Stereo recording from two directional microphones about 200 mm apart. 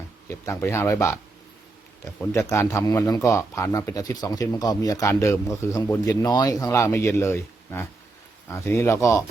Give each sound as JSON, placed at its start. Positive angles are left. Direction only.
{"t": 0.3, "sound": "speech", "side_deg": 15}
{"t": 2.3, "sound": "speech", "side_deg": 15}